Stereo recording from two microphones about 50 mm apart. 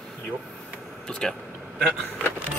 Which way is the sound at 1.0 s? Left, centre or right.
Centre.